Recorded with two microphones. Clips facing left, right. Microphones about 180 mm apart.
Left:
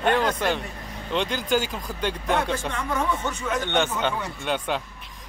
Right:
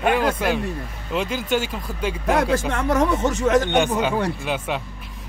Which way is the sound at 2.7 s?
80° right.